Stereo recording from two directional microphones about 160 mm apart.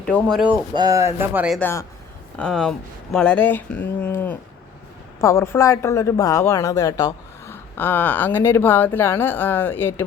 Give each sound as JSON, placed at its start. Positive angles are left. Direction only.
{"t": 0.0, "sound": "speech", "side_deg": 5}
{"t": 0.8, "sound": "speech", "side_deg": -20}
{"t": 1.5, "sound": "speech", "side_deg": 10}